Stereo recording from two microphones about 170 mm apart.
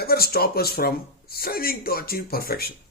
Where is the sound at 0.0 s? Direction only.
65° left (ahead or behind).